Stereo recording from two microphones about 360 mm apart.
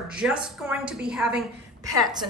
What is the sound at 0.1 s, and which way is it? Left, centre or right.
Speech, centre.